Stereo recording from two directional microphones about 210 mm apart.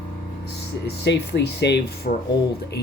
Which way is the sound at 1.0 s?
55° left (ahead or behind).